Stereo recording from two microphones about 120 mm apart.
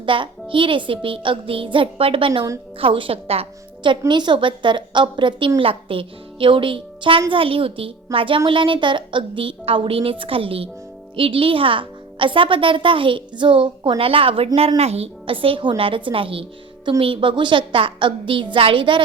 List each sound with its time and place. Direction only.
0.0 s a child's voice: 45° right (ahead or behind)
4.1 s a woman's voice: 40° right (ahead or behind)